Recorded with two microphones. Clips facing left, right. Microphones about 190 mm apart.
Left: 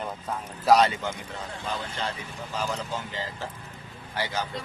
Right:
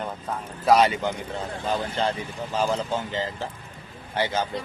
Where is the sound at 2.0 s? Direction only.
35° right (ahead or behind).